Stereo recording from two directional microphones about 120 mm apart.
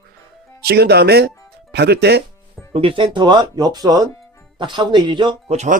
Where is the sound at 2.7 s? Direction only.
50° right (ahead or behind).